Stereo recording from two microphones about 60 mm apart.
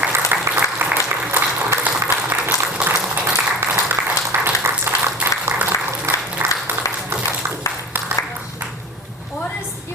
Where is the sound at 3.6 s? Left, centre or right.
Right.